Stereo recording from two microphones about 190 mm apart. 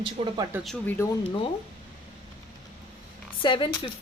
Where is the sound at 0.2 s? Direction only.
30° right (ahead or behind).